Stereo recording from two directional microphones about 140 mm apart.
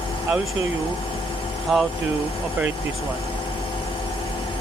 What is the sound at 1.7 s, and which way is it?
Speech, centre (ahead or behind).